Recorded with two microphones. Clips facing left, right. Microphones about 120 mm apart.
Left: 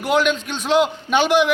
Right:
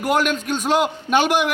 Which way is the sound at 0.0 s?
45° right (ahead or behind).